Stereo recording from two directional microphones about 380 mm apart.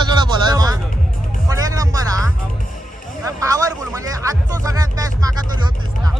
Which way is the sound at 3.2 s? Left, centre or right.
Centre.